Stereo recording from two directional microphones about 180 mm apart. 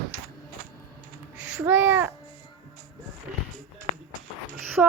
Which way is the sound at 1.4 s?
5° right (ahead or behind).